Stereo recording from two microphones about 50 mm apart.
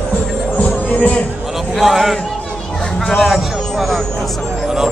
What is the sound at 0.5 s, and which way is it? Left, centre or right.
Music, left.